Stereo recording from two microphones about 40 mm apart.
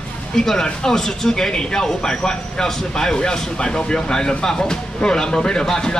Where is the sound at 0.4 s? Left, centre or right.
Centre.